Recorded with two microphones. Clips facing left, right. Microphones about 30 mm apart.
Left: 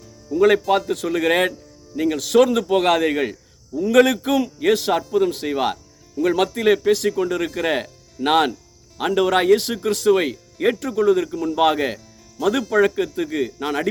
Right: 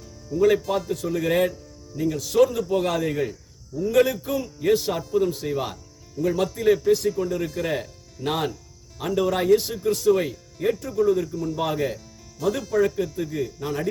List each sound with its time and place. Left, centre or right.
0.3 s speech: left
2.0 s speech: left
7.5 s speech: left
12.7 s speech: left